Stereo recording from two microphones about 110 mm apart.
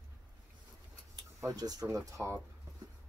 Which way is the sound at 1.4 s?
35° right (ahead or behind).